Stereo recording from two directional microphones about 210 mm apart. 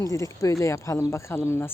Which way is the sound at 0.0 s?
15° left (ahead or behind).